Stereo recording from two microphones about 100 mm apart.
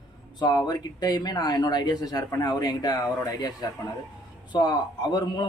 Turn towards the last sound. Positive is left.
turn(degrees=45)  # may be behind; listen again after turning